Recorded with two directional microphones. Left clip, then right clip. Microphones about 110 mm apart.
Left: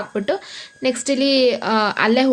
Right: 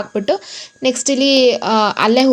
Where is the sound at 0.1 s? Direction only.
30° right (ahead or behind).